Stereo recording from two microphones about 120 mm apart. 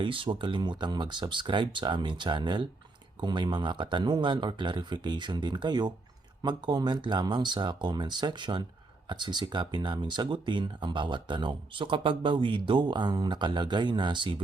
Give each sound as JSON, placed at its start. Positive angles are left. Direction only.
{"t": 0.0, "sound": "speech", "side_deg": -45}